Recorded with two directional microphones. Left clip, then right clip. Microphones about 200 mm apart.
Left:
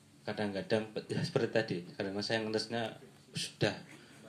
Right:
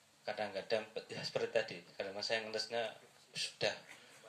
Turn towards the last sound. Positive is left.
turn(degrees=35)  # may be behind; listen again after turning